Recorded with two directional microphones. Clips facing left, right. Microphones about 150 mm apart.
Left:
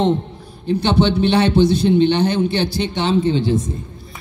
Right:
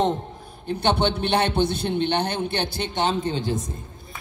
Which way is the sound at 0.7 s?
55° right (ahead or behind).